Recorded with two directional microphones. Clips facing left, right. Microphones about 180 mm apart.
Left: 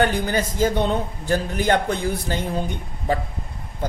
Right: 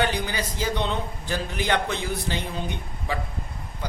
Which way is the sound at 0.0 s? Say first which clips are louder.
Left 5 dB; 45° left (ahead or behind).